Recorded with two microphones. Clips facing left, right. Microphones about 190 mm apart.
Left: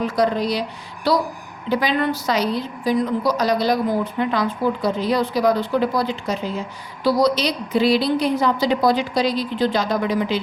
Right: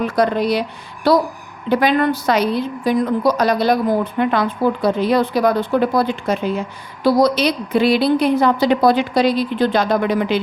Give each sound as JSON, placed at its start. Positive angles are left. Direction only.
{"t": 0.0, "sound": "speech", "side_deg": -60}